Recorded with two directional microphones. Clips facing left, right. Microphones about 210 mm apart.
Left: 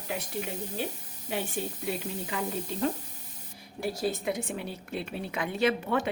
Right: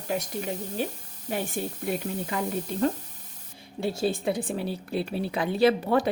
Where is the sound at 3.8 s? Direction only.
25° right (ahead or behind).